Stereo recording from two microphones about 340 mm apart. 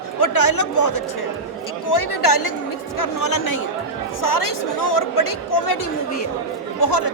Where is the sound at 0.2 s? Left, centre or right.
Left.